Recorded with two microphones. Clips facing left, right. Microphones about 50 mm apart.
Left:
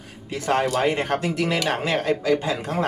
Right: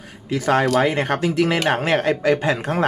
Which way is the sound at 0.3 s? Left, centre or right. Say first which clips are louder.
Right 4 dB; right.